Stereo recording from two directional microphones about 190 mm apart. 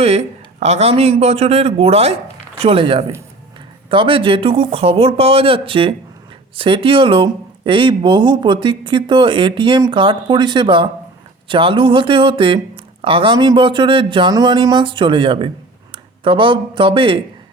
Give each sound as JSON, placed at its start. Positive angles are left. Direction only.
{"t": 0.0, "sound": "speech", "side_deg": -35}